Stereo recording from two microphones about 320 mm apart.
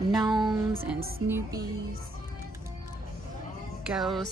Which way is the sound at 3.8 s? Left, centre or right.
Centre.